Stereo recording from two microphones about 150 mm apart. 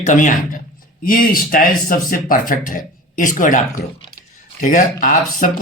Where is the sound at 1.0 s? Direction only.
70° left (ahead or behind).